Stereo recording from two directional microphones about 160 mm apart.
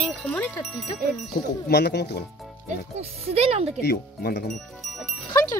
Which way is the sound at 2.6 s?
40° right (ahead or behind).